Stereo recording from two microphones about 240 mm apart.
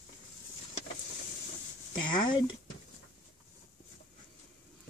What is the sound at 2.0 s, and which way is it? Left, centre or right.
Speech, centre.